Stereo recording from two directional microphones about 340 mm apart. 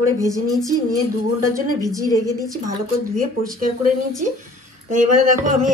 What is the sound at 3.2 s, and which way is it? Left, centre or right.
Speech, right.